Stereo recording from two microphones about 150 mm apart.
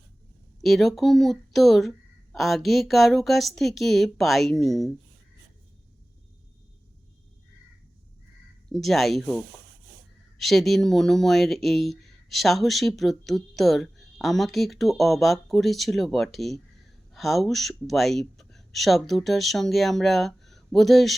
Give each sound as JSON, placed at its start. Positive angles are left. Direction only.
{"t": 0.6, "sound": "speech", "side_deg": 0}
{"t": 8.7, "sound": "speech", "side_deg": 0}